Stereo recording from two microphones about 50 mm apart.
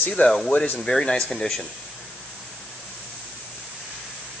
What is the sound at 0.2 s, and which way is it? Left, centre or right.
Speech, left.